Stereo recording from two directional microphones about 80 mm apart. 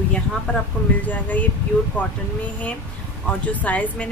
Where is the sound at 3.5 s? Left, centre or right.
Centre.